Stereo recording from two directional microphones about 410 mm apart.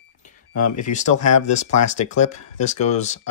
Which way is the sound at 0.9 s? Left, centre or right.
Centre.